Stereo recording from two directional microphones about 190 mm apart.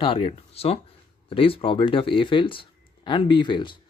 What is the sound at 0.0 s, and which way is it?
Speech, 30° left (ahead or behind).